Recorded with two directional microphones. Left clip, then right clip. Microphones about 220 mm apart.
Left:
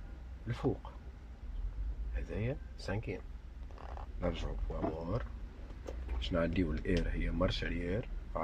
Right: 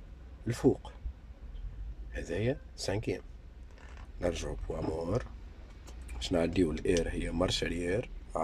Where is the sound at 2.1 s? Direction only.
20° right (ahead or behind).